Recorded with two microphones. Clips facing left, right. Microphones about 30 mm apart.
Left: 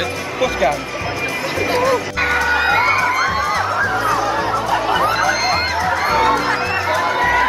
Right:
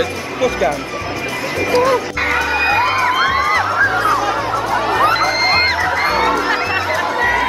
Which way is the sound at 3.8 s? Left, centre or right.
Right.